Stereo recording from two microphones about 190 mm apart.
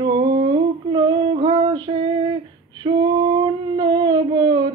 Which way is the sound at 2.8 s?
25° right (ahead or behind).